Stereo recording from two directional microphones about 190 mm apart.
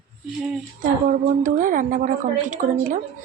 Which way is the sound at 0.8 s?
45° right (ahead or behind).